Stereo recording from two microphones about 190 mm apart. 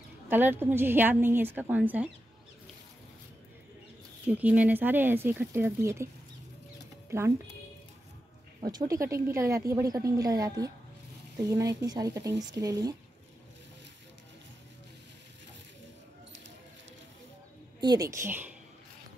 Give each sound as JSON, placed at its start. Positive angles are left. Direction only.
{"t": 0.3, "sound": "a woman's voice", "side_deg": -10}
{"t": 4.3, "sound": "a woman's voice", "side_deg": -10}
{"t": 7.1, "sound": "speech", "side_deg": -15}
{"t": 8.5, "sound": "a woman's voice", "side_deg": -20}
{"t": 17.7, "sound": "a woman's voice", "side_deg": -20}